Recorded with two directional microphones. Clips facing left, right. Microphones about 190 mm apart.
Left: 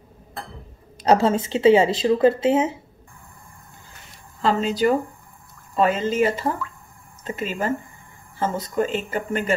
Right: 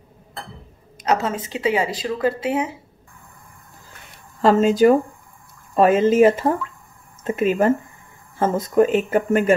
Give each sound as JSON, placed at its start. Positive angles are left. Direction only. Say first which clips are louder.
{"t": 0.9, "sound": "speech", "louder": "left 4 dB", "side_deg": 30}
{"t": 4.4, "sound": "speech", "louder": "right 6 dB", "side_deg": -45}